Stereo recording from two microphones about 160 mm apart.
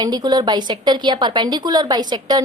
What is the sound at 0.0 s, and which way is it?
A woman's voice, 25° right (ahead or behind).